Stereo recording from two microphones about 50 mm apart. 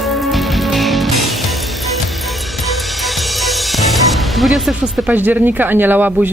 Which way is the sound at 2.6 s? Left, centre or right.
Centre.